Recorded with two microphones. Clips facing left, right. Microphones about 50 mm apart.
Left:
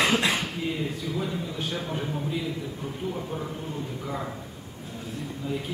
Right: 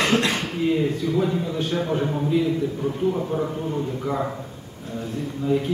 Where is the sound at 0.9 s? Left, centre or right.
Centre.